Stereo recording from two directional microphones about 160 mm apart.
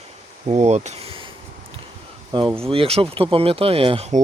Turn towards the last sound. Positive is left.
turn(degrees=-40)  # may be behind; listen again after turning